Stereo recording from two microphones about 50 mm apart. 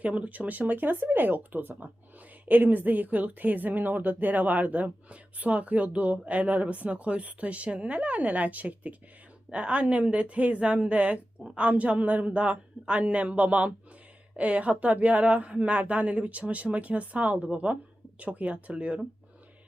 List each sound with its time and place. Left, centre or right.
0.0 s speech: right